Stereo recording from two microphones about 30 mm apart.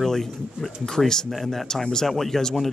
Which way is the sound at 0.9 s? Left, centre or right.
Centre.